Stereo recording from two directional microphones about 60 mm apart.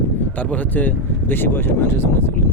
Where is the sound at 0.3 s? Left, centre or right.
Left.